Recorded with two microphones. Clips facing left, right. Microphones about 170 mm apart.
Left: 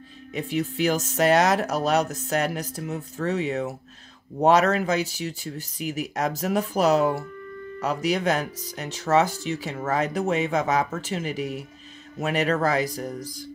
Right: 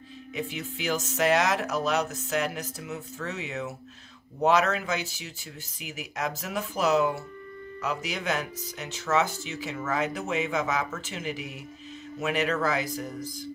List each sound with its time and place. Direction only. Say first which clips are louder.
0.4 s speech: left 9 dB; 40° left (ahead or behind)